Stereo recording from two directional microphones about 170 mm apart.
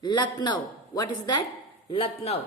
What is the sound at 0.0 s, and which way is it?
A man's voice, 25° left (ahead or behind).